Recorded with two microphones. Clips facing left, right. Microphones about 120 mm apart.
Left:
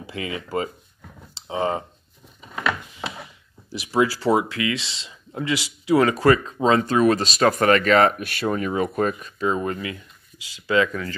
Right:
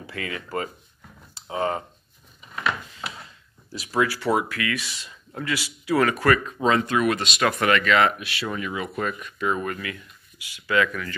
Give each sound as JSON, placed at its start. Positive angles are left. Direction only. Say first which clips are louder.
{"t": 0.1, "sound": "speech", "louder": "left 3 dB", "side_deg": 20}
{"t": 3.3, "sound": "speech", "louder": "left 3 dB", "side_deg": 20}